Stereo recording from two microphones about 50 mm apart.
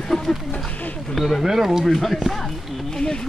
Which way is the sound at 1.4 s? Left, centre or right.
Centre.